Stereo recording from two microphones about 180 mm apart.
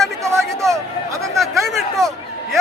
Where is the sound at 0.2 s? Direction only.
15° right (ahead or behind).